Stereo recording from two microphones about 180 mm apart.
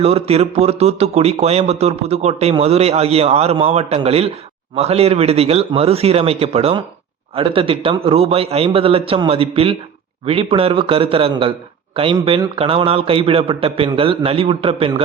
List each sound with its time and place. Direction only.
0.0 s speech: 35° right (ahead or behind)